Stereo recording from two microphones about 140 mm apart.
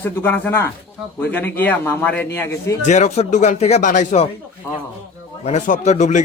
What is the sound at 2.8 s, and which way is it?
Speech, 55° left (ahead or behind).